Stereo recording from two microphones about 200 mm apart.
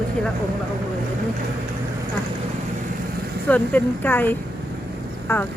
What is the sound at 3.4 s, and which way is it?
Speech, 10° left (ahead or behind).